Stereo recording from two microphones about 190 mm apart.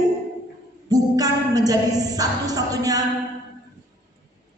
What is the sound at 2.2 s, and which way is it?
Speech, 20° right (ahead or behind).